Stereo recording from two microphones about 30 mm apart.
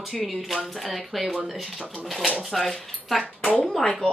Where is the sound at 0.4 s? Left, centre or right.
Centre.